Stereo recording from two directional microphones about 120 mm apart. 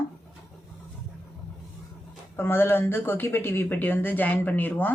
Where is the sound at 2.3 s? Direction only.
20° left (ahead or behind).